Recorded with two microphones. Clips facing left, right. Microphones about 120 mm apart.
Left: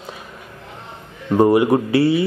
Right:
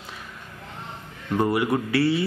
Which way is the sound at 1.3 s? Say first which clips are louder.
Left 9 dB; 25° left (ahead or behind).